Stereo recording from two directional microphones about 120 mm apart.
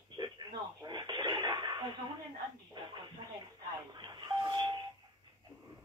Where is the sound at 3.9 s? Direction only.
35° right (ahead or behind).